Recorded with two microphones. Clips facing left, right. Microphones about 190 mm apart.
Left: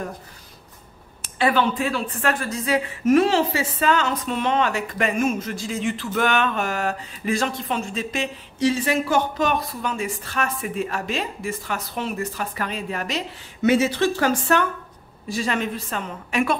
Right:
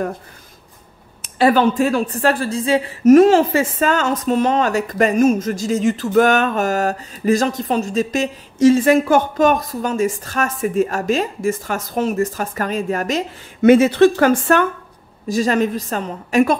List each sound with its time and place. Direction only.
1.4 s a woman's voice: 40° right (ahead or behind)
3.0 s a woman's voice: 45° right (ahead or behind)
15.2 s a woman's voice: 40° right (ahead or behind)